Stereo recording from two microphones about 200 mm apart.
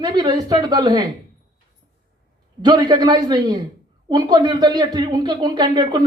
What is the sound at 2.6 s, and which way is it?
Speech, 20° right (ahead or behind).